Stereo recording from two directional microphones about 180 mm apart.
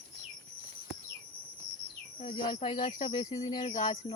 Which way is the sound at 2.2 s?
30° left (ahead or behind).